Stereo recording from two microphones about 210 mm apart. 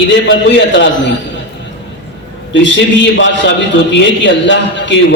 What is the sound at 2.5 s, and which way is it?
A man's voice, 60° left (ahead or behind).